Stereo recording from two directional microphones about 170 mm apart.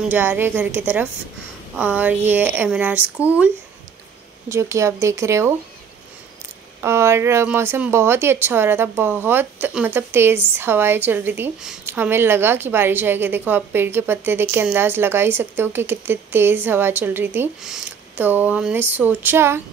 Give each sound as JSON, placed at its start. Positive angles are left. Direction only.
{"t": 0.1, "sound": "a woman's voice", "side_deg": -10}
{"t": 4.5, "sound": "a woman's voice", "side_deg": -15}
{"t": 6.8, "sound": "a woman's voice", "side_deg": -15}